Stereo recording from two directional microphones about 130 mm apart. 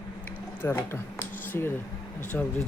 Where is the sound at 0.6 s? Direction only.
15° left (ahead or behind).